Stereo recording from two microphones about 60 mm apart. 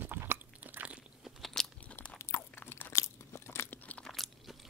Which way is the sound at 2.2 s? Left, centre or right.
Left.